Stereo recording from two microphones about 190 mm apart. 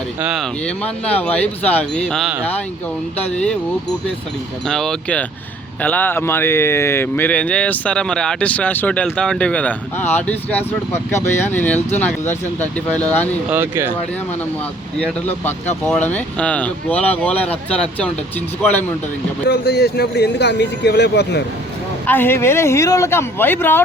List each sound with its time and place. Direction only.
0.2 s speech: 5° right (ahead or behind)
0.6 s speech: 5° left (ahead or behind)
4.6 s speech: 5° left (ahead or behind)
13.5 s speech: 10° right (ahead or behind)
14.9 s speech: 10° left (ahead or behind)
19.5 s speech: 60° left (ahead or behind)
22.0 s speech: 10° left (ahead or behind)